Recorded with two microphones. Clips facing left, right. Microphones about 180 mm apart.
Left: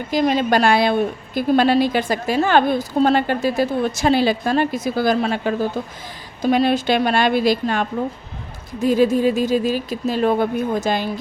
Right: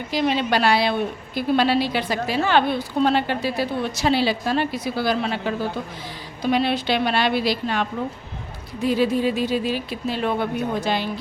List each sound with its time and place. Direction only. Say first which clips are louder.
0.1 s a woman's voice: left 4 dB; 45° left (ahead or behind)